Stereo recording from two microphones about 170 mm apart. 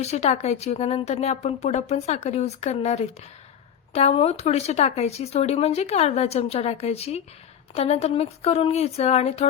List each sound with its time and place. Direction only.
0.0 s speech: 40° left (ahead or behind)